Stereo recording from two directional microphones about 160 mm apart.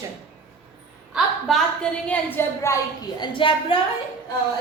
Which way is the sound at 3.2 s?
30° left (ahead or behind).